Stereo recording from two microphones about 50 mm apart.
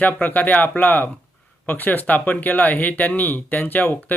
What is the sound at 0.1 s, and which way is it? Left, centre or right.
Speech, left.